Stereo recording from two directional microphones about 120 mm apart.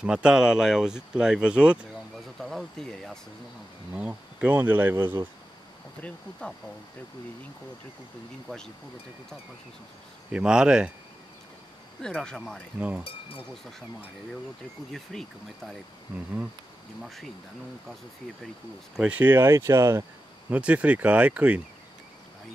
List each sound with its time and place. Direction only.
0.0 s speech: 10° right (ahead or behind)
2.4 s speech: 5° left (ahead or behind)
3.9 s speech: 10° right (ahead or behind)
10.3 s speech: 5° right (ahead or behind)
12.0 s speech: 5° left (ahead or behind)
13.0 s speech: 50° left (ahead or behind)
14.9 s speech: centre (ahead or behind)
17.0 s speech: centre (ahead or behind)
18.9 s speech: 10° right (ahead or behind)
20.5 s speech: 10° right (ahead or behind)